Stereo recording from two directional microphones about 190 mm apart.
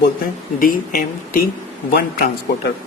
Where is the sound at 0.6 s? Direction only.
50° left (ahead or behind).